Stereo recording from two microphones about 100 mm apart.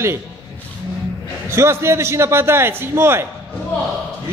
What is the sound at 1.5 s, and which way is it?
A man's voice, 25° right (ahead or behind).